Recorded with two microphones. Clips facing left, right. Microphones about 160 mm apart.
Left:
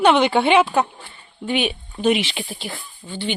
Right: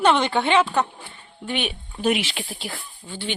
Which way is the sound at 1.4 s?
Centre (ahead or behind).